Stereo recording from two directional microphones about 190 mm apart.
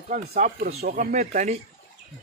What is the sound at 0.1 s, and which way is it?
Speech, 45° right (ahead or behind).